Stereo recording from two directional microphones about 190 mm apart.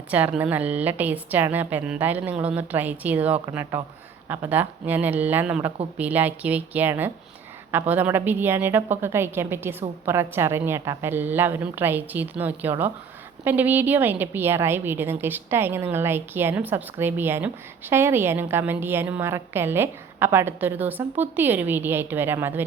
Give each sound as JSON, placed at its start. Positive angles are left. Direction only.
{"t": 0.1, "sound": "a woman's voice", "side_deg": -10}